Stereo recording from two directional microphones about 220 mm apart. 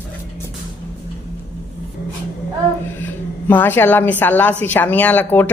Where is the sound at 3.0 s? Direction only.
10° left (ahead or behind).